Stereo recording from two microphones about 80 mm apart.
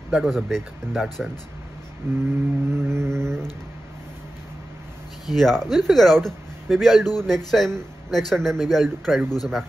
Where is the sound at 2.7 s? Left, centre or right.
Right.